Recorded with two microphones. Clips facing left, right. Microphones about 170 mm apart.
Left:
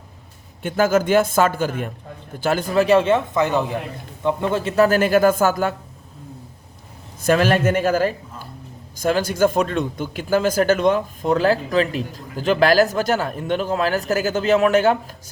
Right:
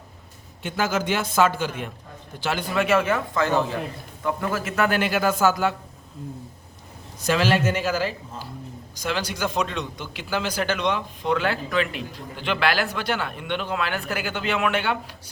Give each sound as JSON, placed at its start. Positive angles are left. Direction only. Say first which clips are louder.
{"t": 0.6, "sound": "a man's voice", "louder": "left 7 dB", "side_deg": 50}
{"t": 7.2, "sound": "a man's voice", "louder": "left 4 dB", "side_deg": 50}